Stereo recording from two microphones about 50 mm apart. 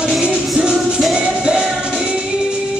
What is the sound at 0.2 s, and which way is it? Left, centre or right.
Music, right.